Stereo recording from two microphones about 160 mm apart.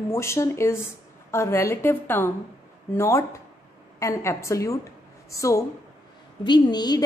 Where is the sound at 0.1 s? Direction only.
15° left (ahead or behind).